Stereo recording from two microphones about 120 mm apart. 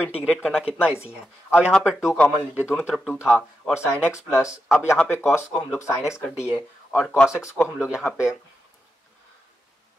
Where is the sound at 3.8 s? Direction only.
10° right (ahead or behind).